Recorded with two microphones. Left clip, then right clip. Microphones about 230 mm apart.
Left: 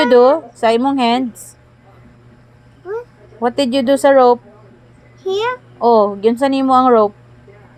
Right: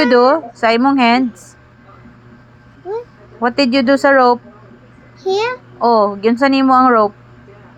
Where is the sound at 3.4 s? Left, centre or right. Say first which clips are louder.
Right 2 dB; left.